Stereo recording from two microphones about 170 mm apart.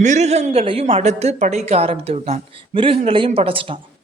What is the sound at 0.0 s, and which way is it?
A woman's voice, 45° right (ahead or behind).